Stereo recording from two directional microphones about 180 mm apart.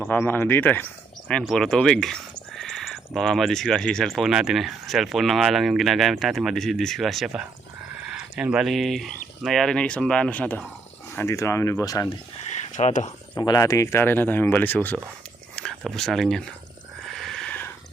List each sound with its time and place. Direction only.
0.0 s speech: 10° left (ahead or behind)
2.6 s a sound: centre (ahead or behind)
3.2 s speech: centre (ahead or behind); by 12.1 s 20° left (ahead or behind)
12.7 s speech: 45° left (ahead or behind)
13.4 s speech: 20° left (ahead or behind); by 16.4 s centre (ahead or behind)
17.1 s a sound: centre (ahead or behind)